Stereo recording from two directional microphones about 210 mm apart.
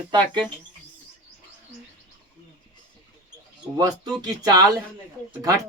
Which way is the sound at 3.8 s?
20° right (ahead or behind).